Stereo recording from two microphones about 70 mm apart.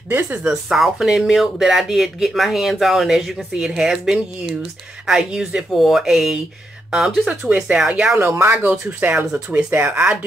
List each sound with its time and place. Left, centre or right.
0.1 s speech: right
0.4 s speech: centre
8.2 s speech: right
9.8 s speech: right